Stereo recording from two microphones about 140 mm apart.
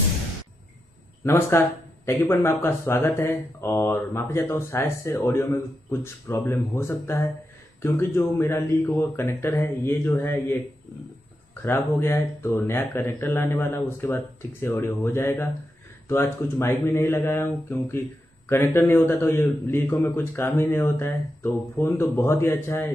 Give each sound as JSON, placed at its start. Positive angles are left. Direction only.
{"t": 1.2, "sound": "a man's voice", "side_deg": 20}
{"t": 11.6, "sound": "a man's voice", "side_deg": 15}